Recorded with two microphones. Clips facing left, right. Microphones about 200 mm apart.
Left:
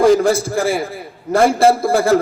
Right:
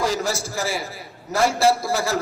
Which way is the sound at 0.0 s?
55° left (ahead or behind).